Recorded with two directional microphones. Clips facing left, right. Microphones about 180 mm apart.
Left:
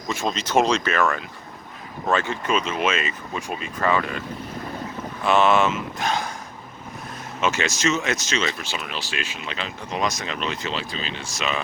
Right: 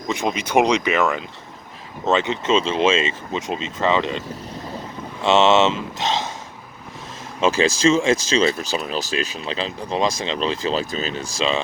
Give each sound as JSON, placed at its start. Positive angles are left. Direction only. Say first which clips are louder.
{"t": 0.1, "sound": "speech", "louder": "right 2 dB", "side_deg": -15}
{"t": 5.2, "sound": "speech", "louder": "right 3 dB", "side_deg": -25}
{"t": 7.4, "sound": "speech", "louder": "right 6 dB", "side_deg": -30}
{"t": 11.3, "sound": "speech", "louder": "right 5 dB", "side_deg": -25}